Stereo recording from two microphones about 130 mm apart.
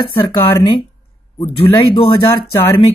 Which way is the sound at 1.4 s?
45° left (ahead or behind).